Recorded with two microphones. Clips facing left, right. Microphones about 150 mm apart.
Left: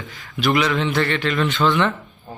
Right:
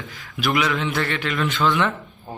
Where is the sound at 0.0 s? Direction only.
Centre (ahead or behind).